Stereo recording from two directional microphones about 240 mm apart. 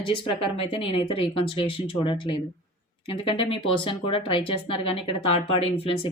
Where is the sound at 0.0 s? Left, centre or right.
Left.